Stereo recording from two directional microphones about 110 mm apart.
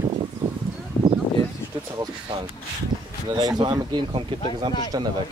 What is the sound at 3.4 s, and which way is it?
Speech, 40° right (ahead or behind).